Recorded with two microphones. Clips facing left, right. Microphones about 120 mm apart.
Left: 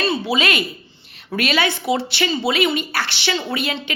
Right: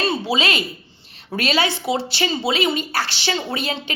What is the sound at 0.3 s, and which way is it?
A woman's voice, 30° right (ahead or behind).